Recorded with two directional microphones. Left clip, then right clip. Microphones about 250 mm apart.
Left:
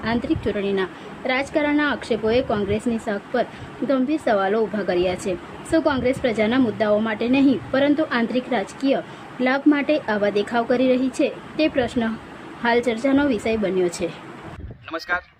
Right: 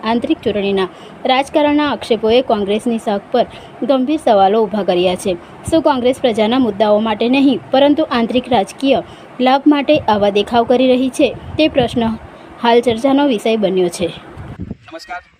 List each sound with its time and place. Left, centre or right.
0.0 s a woman's voice: centre